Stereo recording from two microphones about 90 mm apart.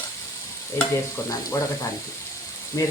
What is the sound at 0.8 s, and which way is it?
Speech, 30° left (ahead or behind).